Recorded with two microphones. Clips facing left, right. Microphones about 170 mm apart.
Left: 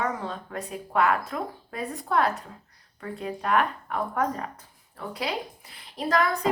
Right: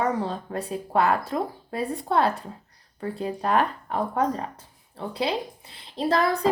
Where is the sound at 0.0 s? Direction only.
30° right (ahead or behind).